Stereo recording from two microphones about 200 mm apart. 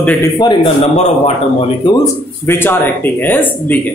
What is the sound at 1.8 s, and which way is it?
Speech, 20° left (ahead or behind).